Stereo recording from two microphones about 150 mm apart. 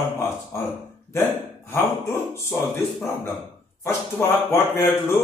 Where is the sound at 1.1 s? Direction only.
15° left (ahead or behind).